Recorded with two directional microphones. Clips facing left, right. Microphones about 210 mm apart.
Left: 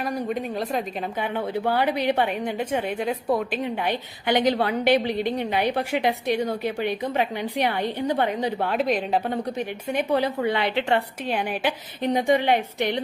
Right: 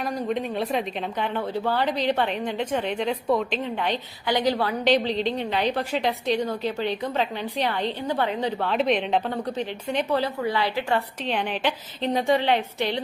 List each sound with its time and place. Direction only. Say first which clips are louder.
0.0 s a woman's voice: even; centre (ahead or behind)
1.5 s a woman's voice: left 2 dB; 10° left (ahead or behind)
10.4 s a woman's voice: left 2 dB; 25° left (ahead or behind)
11.3 s a woman's voice: even; 10° left (ahead or behind)